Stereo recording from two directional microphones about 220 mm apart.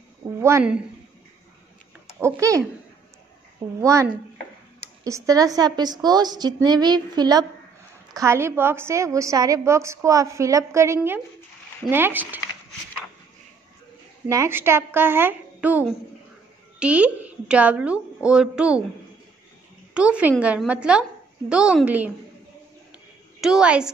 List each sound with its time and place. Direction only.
0.4 s a woman's voice: 10° right (ahead or behind)
2.1 s a woman's voice: 10° right (ahead or behind)
3.8 s a woman's voice: 15° right (ahead or behind)
14.2 s a woman's voice: 10° right (ahead or behind)
19.9 s a woman's voice: 5° right (ahead or behind)
23.4 s a woman's voice: 5° right (ahead or behind)